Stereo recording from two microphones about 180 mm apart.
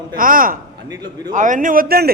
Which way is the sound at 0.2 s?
50° right (ahead or behind).